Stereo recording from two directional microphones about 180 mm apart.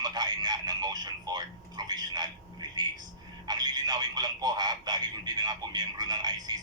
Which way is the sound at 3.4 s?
25° right (ahead or behind).